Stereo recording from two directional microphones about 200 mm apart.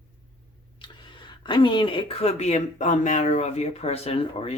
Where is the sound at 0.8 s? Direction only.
25° left (ahead or behind).